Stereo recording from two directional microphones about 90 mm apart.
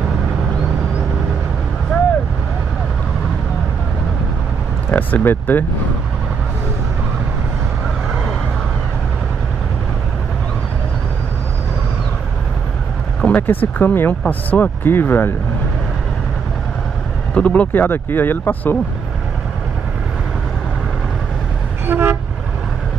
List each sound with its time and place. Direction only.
4.9 s speech: 20° left (ahead or behind)
13.2 s speech: 20° left (ahead or behind)
17.3 s speech: 15° left (ahead or behind)
21.8 s vehicle: 25° right (ahead or behind)